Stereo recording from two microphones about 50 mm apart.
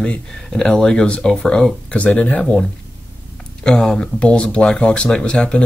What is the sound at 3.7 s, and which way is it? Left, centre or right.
Speech, centre.